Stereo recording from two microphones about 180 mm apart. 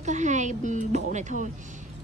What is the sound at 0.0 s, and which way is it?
Speech, 40° right (ahead or behind).